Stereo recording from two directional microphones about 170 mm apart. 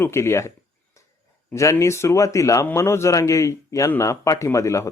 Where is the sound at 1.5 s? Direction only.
15° left (ahead or behind).